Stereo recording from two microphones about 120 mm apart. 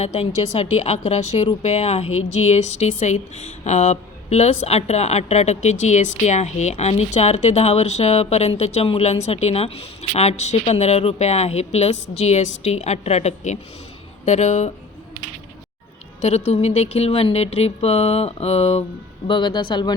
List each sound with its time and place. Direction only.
0.0 s a woman's voice: 65° left (ahead or behind)
16.2 s a woman's voice: 60° left (ahead or behind)
19.3 s speech: 40° left (ahead or behind)